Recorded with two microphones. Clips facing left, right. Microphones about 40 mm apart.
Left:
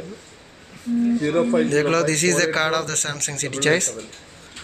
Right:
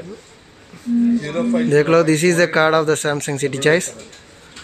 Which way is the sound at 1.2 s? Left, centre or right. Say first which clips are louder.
Left 1 dB; left.